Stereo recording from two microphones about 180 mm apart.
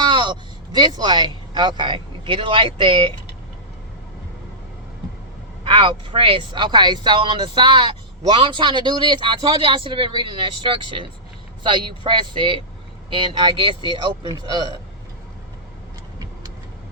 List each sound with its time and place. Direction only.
0.0 s speech: 25° right (ahead or behind)
5.6 s speech: 30° right (ahead or behind)